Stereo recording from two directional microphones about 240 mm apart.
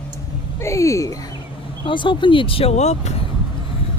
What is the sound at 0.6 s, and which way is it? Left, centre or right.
Speech, centre.